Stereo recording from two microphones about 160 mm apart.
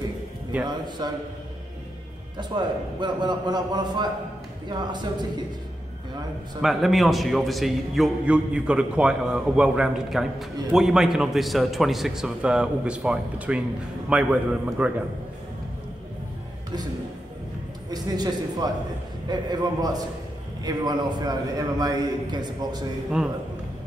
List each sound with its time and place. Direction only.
0.7 s a man's voice: 25° right (ahead or behind)
2.3 s a man's voice: 30° right (ahead or behind)
6.6 s a man's voice: centre (ahead or behind)
17.8 s a man's voice: 25° right (ahead or behind)